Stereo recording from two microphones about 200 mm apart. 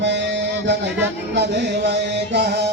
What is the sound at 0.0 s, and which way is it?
Music, 60° right (ahead or behind).